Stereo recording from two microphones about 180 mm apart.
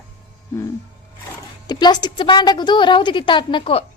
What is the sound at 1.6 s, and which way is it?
A woman's voice, 25° left (ahead or behind).